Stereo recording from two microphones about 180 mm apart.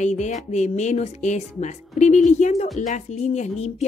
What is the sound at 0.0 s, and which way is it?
Speech, 40° left (ahead or behind).